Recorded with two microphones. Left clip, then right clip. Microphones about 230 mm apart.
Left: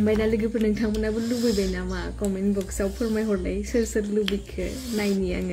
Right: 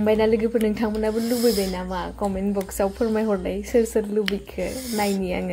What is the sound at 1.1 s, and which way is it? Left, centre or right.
Speech, right.